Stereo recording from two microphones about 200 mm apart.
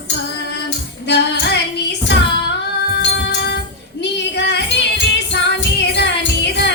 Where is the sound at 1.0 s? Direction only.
60° left (ahead or behind).